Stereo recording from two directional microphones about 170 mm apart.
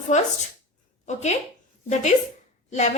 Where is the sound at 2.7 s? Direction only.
45° left (ahead or behind).